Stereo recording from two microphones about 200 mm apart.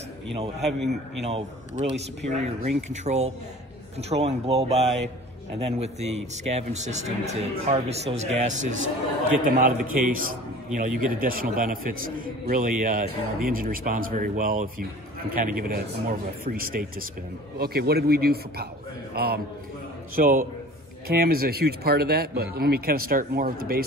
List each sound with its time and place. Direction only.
1.2 s a man's voice: 30° right (ahead or behind)